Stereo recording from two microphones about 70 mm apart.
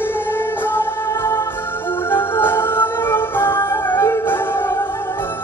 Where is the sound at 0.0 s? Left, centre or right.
Left.